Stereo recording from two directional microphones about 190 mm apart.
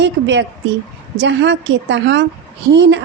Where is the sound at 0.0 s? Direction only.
70° right (ahead or behind).